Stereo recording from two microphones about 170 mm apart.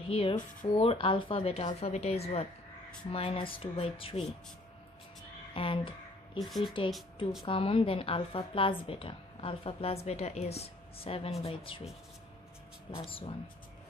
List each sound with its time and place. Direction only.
0.1 s a woman's voice: 30° left (ahead or behind)
5.5 s a sound: 30° left (ahead or behind)
6.6 s a woman's voice: 30° left (ahead or behind)
12.9 s a woman's voice: 30° left (ahead or behind)